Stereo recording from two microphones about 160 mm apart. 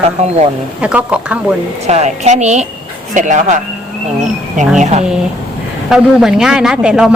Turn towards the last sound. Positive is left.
turn(degrees=-5)  # may be behind; listen again after turning